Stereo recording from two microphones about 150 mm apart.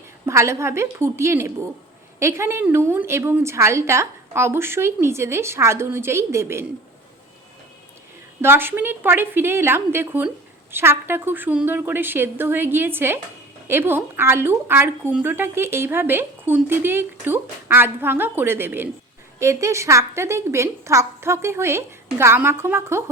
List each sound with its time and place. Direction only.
0.3 s a woman's voice: 20° right (ahead or behind)
8.4 s a woman's voice: 15° right (ahead or behind)